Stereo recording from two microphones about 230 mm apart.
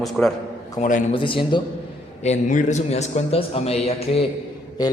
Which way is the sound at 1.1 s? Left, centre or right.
Left.